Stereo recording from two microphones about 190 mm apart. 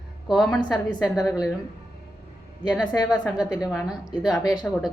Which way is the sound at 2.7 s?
Centre (ahead or behind).